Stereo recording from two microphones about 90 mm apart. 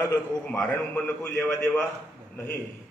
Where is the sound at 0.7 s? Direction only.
20° left (ahead or behind).